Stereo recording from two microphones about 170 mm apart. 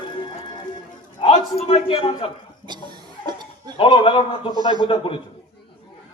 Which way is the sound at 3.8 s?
30° left (ahead or behind).